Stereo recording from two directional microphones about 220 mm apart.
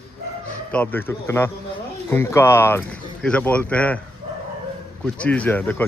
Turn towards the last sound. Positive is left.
turn(degrees=10)  # may be behind; listen again after turning